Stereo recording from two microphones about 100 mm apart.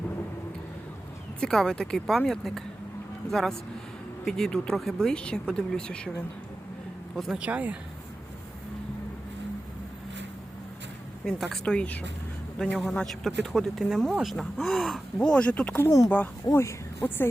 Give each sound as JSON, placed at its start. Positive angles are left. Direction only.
{"t": 1.4, "sound": "speech", "side_deg": 5}
{"t": 7.3, "sound": "speech", "side_deg": -15}
{"t": 11.3, "sound": "speech", "side_deg": 0}
{"t": 15.8, "sound": "speech", "side_deg": 30}
{"t": 16.0, "sound": "a woman's voice", "side_deg": 20}